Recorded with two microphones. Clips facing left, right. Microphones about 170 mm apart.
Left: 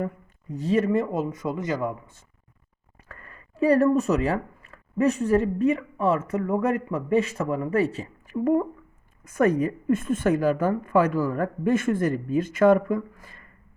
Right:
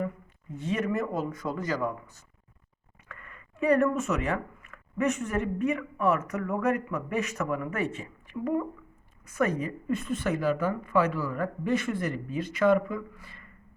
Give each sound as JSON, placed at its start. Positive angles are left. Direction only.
{"t": 0.5, "sound": "a man's voice", "side_deg": 35}
{"t": 3.1, "sound": "a woman's voice", "side_deg": 35}